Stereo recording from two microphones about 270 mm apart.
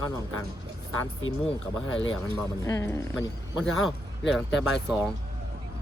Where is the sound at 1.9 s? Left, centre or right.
Left.